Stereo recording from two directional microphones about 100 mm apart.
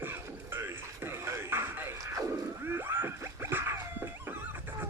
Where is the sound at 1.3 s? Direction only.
25° right (ahead or behind).